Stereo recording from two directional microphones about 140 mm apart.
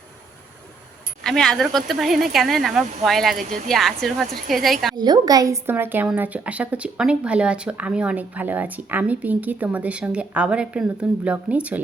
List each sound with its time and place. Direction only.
1.2 s speech: 5° left (ahead or behind)
4.9 s a woman's voice: 30° right (ahead or behind)
5.6 s speech: 15° right (ahead or behind)